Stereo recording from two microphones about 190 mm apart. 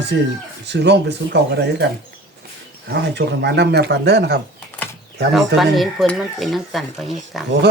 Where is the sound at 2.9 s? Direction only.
65° right (ahead or behind).